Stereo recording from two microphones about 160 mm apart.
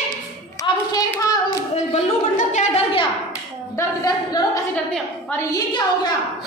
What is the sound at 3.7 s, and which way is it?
Speech, 25° left (ahead or behind).